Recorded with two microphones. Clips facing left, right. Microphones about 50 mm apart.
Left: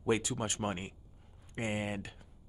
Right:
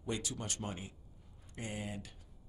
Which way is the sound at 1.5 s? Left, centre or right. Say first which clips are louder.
Left 7 dB; left.